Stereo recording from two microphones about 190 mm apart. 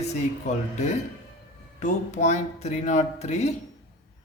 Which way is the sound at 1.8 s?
40° left (ahead or behind).